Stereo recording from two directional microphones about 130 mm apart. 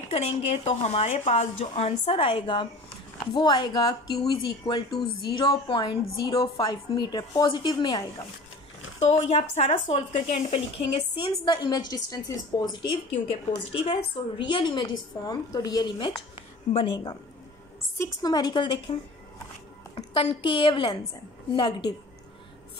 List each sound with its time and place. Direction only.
0.1 s a woman's voice: 55° left (ahead or behind); by 8.0 s 35° left (ahead or behind)
9.0 s speech: 50° left (ahead or behind)
11.1 s a woman's voice: 40° left (ahead or behind)
14.4 s a woman's voice: 40° left (ahead or behind)
20.0 s a woman's voice: 40° left (ahead or behind)